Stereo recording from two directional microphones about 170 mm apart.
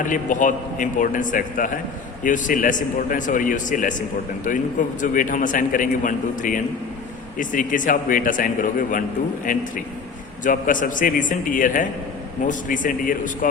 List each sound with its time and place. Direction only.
0.0 s a man's voice: 50° left (ahead or behind)